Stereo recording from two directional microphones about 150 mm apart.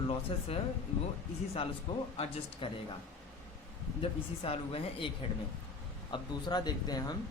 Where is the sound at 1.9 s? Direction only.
30° left (ahead or behind).